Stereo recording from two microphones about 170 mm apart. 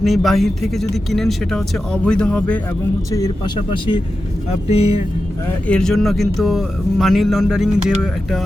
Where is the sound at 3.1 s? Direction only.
25° left (ahead or behind).